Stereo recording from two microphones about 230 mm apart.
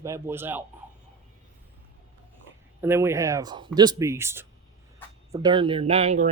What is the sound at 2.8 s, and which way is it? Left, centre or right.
Speech, centre.